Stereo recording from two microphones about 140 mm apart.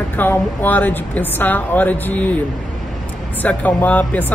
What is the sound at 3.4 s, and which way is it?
Speech, 10° left (ahead or behind).